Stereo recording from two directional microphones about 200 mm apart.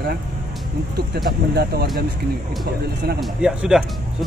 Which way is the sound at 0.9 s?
55° right (ahead or behind).